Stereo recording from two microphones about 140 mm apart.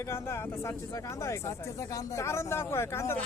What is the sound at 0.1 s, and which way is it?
Speech, 20° left (ahead or behind).